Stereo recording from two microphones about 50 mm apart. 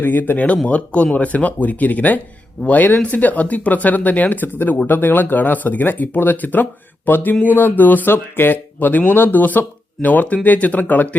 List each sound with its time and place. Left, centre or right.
0.0 s speech: left